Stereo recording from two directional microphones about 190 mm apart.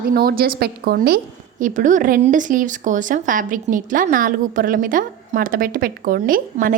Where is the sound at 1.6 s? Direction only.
40° right (ahead or behind).